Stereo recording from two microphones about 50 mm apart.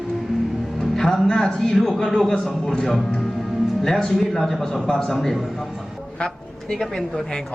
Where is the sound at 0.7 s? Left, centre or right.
Centre.